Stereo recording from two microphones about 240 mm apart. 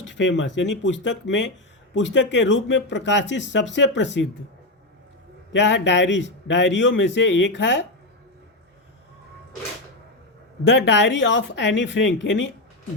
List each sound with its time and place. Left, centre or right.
0.0 s speech: left
5.5 s speech: left
10.7 s speech: left